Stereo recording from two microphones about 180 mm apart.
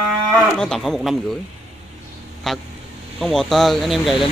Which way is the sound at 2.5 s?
Centre (ahead or behind).